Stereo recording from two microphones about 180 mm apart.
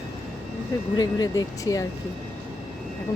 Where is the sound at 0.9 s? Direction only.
20° left (ahead or behind).